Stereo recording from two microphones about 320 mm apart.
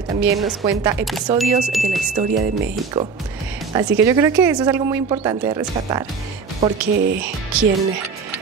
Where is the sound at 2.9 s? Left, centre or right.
Centre.